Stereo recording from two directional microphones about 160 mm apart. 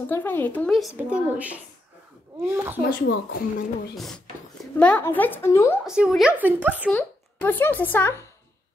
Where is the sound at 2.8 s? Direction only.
70° left (ahead or behind).